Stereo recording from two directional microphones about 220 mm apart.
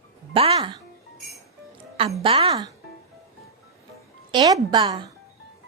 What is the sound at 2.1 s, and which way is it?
Speech, 25° right (ahead or behind).